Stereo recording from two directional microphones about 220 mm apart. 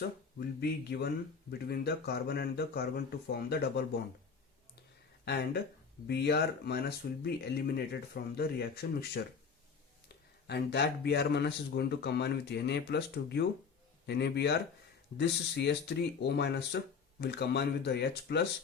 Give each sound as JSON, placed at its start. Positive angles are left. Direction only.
{"t": 0.3, "sound": "speech", "side_deg": 45}
{"t": 5.2, "sound": "speech", "side_deg": 45}
{"t": 10.4, "sound": "speech", "side_deg": 50}